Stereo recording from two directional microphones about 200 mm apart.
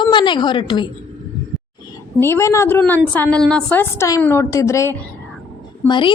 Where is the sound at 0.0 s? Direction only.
25° left (ahead or behind).